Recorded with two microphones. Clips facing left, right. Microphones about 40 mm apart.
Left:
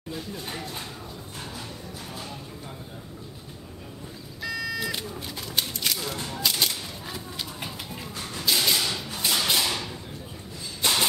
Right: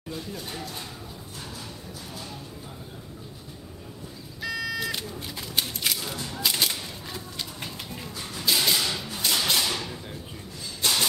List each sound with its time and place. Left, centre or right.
0.1 s speech: centre
0.5 s speech: left
4.4 s vehicle: centre
5.6 s a sound: centre
7.1 s bird: centre
10.8 s a sound: centre